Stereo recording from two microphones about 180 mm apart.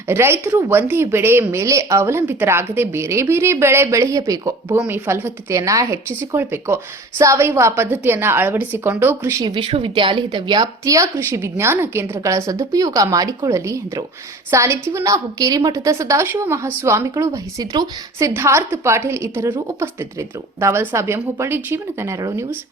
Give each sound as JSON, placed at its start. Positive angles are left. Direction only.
{"t": 0.1, "sound": "a woman's voice", "side_deg": -15}
{"t": 9.6, "sound": "a woman's voice", "side_deg": -30}